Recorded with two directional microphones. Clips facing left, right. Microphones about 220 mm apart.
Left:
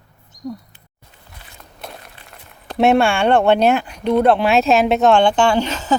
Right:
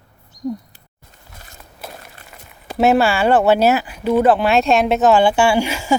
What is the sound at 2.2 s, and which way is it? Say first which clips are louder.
Speech: right 1 dB; 5° right (ahead or behind).